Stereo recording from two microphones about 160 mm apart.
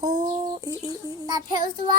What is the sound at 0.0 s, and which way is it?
Child singing, 25° right (ahead or behind).